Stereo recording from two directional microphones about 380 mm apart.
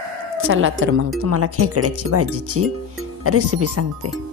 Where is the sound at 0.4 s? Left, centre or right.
Right.